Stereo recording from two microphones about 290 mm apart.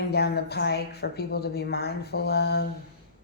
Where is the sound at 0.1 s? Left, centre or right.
Left.